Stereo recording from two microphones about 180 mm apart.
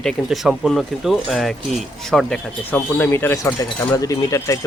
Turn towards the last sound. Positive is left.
turn(degrees=20)  # may be behind; listen again after turning